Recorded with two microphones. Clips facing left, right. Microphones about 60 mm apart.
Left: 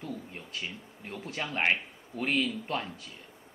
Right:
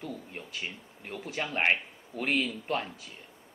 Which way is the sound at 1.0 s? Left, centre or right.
Right.